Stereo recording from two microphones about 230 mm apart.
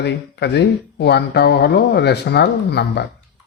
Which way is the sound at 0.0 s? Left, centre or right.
Left.